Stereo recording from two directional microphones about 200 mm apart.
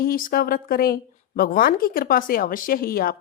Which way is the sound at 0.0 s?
45° left (ahead or behind).